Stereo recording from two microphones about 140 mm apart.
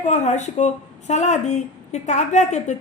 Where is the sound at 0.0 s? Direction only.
55° left (ahead or behind).